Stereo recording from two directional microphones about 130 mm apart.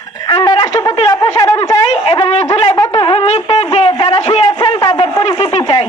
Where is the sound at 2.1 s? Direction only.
50° left (ahead or behind).